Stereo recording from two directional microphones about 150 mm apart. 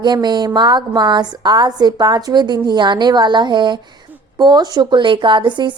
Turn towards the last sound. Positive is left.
turn(degrees=-30)  # may be behind; listen again after turning